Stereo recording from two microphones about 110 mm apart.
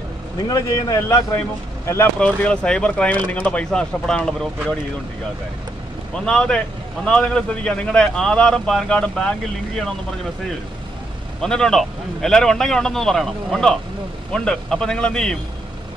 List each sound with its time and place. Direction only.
0.5 s a man's voice: 35° left (ahead or behind)
2.1 s a man's voice: 10° left (ahead or behind)
6.1 s a man's voice: 5° left (ahead or behind)
11.4 s a man's voice: 5° left (ahead or behind)